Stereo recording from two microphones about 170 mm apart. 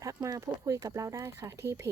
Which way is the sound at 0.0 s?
20° right (ahead or behind).